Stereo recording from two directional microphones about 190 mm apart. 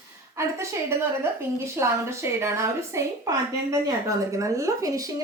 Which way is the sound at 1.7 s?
15° right (ahead or behind).